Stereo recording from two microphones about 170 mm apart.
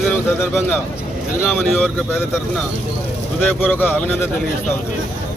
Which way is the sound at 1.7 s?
10° left (ahead or behind).